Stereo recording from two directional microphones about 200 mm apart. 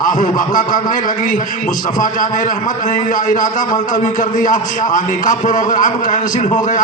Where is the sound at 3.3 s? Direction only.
40° left (ahead or behind).